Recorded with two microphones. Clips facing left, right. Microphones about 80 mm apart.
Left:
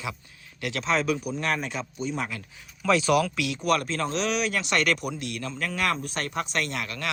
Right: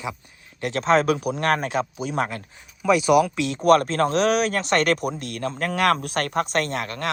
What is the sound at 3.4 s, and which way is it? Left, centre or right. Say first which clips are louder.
Speech: right 8 dB; right.